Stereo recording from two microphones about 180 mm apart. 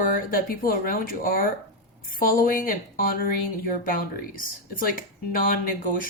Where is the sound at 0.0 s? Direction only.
50° left (ahead or behind).